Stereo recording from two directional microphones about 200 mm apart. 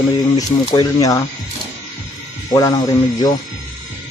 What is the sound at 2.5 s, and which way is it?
Speech, 20° left (ahead or behind).